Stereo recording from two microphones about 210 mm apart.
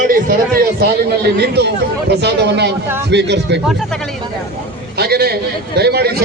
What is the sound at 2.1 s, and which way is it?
A man's voice, 55° right (ahead or behind).